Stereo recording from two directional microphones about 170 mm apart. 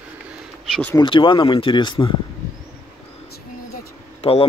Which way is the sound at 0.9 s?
30° left (ahead or behind).